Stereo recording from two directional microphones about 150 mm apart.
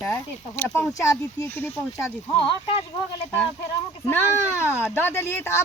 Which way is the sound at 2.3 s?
35° left (ahead or behind).